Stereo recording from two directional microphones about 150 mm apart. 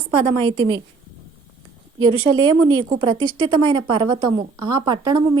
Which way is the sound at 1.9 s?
30° right (ahead or behind).